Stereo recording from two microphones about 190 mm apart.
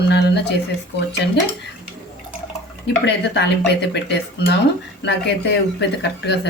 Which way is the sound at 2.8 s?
65° left (ahead or behind).